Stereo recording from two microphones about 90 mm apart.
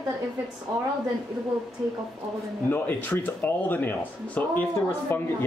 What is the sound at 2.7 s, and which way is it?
Speech, 20° left (ahead or behind).